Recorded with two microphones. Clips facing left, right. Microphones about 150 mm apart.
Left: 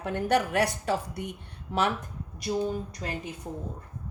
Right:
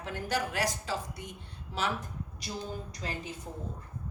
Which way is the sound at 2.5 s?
45° left (ahead or behind).